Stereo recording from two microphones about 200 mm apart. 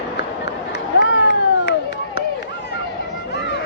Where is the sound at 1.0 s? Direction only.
60° left (ahead or behind).